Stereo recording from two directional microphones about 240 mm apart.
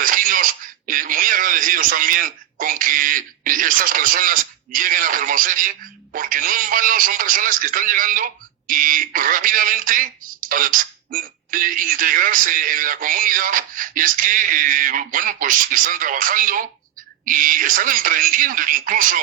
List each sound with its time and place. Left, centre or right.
0.0 s speech: right